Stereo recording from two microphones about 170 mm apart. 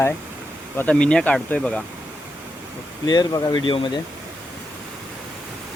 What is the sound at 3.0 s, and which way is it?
Speech, 25° left (ahead or behind).